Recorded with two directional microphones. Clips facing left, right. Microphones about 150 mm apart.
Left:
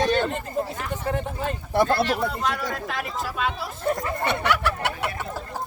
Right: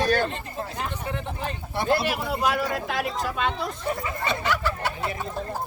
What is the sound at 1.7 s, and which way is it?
Speech, 50° left (ahead or behind).